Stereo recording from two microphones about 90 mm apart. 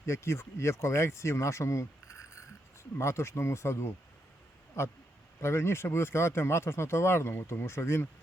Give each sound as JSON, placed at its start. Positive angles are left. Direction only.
{"t": 0.0, "sound": "speech", "side_deg": 30}
{"t": 3.0, "sound": "speech", "side_deg": 30}